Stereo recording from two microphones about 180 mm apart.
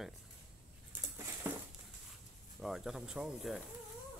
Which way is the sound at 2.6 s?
Centre (ahead or behind).